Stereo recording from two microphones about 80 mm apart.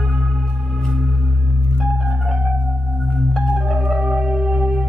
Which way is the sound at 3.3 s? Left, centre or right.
Centre.